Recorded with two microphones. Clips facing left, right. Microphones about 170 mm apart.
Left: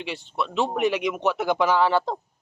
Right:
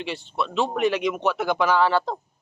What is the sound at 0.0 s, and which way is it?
Speech, 15° left (ahead or behind).